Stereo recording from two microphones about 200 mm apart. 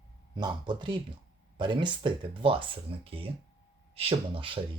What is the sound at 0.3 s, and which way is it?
Speech, 25° right (ahead or behind).